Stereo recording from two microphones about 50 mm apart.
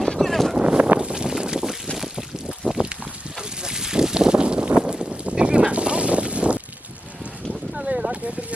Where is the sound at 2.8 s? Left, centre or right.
Right.